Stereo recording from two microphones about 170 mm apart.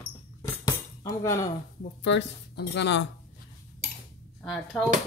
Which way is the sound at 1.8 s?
85° left.